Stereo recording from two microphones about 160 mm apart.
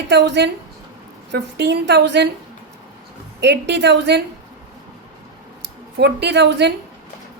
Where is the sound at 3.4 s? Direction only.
90° right.